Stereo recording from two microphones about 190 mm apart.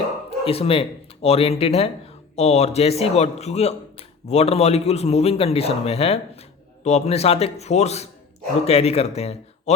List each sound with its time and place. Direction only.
0.3 s a man's voice: 30° left (ahead or behind)